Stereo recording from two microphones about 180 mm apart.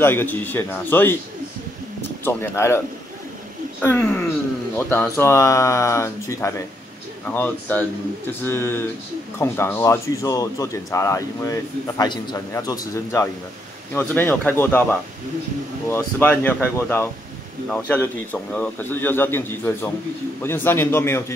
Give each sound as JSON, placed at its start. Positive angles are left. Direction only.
{"t": 0.0, "sound": "speech", "side_deg": 10}
{"t": 2.2, "sound": "speech", "side_deg": 15}
{"t": 3.8, "sound": "speech", "side_deg": 10}